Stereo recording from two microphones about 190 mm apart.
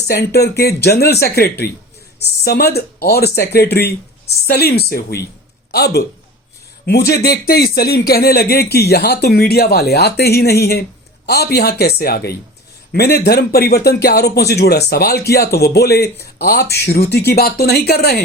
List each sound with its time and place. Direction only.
0.1 s a man's voice: 55° left (ahead or behind)